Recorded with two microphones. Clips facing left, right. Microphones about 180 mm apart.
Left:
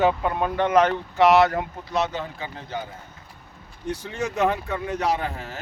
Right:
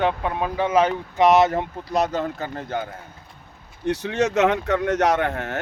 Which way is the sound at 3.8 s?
70° right (ahead or behind).